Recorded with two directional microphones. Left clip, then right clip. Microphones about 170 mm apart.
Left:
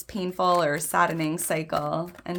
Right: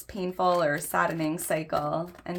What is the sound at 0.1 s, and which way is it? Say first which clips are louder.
Speech: left 2 dB; 40° left (ahead or behind).